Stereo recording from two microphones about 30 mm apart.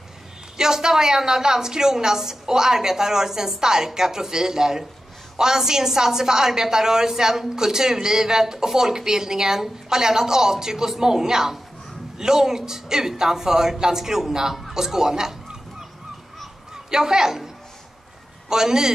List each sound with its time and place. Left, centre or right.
0.6 s a woman's voice: centre
16.7 s a woman's voice: centre
18.5 s a woman's voice: right